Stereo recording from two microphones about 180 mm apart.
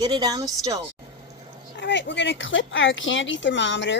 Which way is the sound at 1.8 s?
85° left.